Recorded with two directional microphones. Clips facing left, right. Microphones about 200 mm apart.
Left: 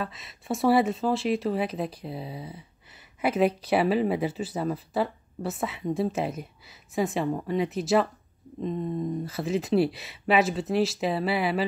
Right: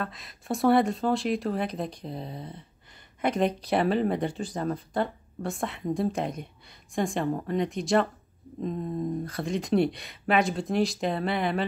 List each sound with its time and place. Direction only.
0.0 s speech: centre (ahead or behind)
9.2 s speech: 5° left (ahead or behind)